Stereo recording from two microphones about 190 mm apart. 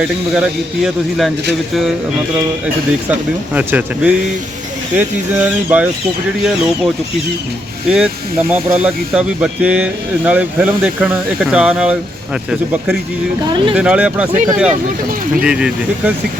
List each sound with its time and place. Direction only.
0.3 s speech: centre (ahead or behind)
3.1 s speech: 10° right (ahead or behind)
7.9 s speech: 5° right (ahead or behind)
13.7 s speech: 5° right (ahead or behind)
14.3 s speech: 40° right (ahead or behind)
15.4 s speech: 5° right (ahead or behind)